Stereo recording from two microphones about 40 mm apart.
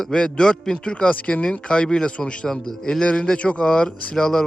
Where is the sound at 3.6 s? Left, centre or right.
Centre.